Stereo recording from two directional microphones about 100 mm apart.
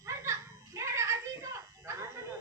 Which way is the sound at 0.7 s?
30° right (ahead or behind).